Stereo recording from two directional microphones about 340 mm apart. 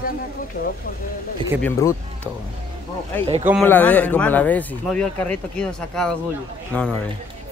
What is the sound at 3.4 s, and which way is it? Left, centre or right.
Speech, centre.